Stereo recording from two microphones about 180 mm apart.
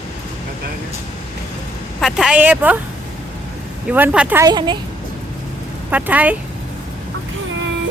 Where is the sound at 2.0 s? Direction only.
5° right (ahead or behind).